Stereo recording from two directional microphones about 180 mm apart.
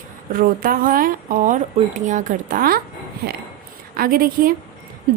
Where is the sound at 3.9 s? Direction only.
55° right (ahead or behind).